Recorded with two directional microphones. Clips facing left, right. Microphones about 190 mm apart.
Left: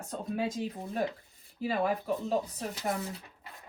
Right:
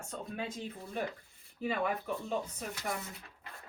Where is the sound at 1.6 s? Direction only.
35° left (ahead or behind).